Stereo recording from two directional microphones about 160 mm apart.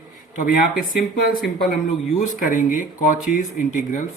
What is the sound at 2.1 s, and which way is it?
A man's voice, 55° left (ahead or behind).